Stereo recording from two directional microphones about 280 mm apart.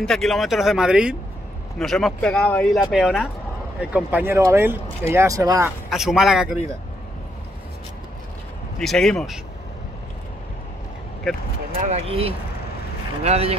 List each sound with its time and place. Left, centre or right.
0.0 s speech: centre
5.9 s speech: centre
8.7 s speech: centre
11.7 s speech: right